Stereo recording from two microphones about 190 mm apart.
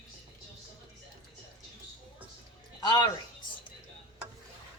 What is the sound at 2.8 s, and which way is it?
Speech, 20° left (ahead or behind).